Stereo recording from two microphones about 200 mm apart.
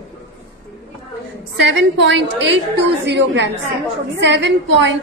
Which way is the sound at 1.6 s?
60° right (ahead or behind).